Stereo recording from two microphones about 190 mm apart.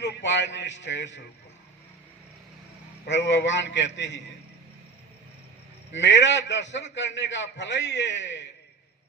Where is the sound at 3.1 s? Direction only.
70° left (ahead or behind).